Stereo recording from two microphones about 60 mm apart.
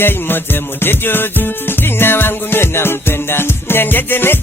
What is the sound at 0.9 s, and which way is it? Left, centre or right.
Music, left.